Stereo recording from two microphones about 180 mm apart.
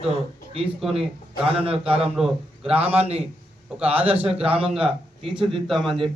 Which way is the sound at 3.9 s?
35° right (ahead or behind).